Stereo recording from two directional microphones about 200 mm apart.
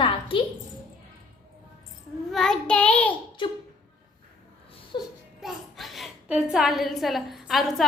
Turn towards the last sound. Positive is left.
turn(degrees=0)  # may be behind; listen again after turning